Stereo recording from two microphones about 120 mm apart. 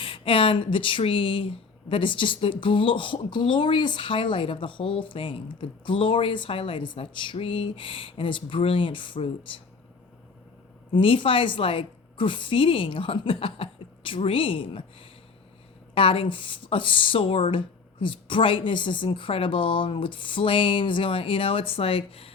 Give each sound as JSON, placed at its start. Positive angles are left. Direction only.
{"t": 0.0, "sound": "speech", "side_deg": 50}
{"t": 10.9, "sound": "speech", "side_deg": 45}
{"t": 16.0, "sound": "speech", "side_deg": 50}